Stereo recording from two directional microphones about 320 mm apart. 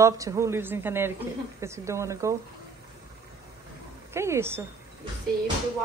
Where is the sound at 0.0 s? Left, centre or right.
Centre.